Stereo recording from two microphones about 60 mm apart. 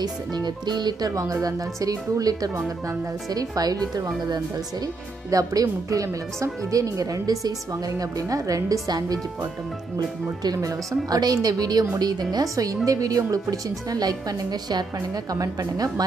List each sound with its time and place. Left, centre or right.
1.0 s a woman's voice: right
5.3 s speech: right
6.4 s speech: right
10.4 s a woman's voice: right
15.2 s speech: right